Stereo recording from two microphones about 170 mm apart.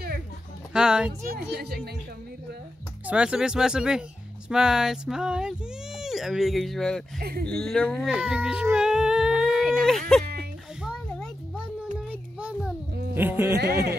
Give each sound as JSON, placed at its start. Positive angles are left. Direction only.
{"t": 0.7, "sound": "speech", "side_deg": -5}
{"t": 1.2, "sound": "speech", "side_deg": -65}
{"t": 3.1, "sound": "speech", "side_deg": -5}
{"t": 7.2, "sound": "speech", "side_deg": -60}
{"t": 7.4, "sound": "speech", "side_deg": 5}
{"t": 8.1, "sound": "a sound", "side_deg": -10}
{"t": 12.1, "sound": "child singing", "side_deg": -5}
{"t": 13.1, "sound": "speech", "side_deg": -10}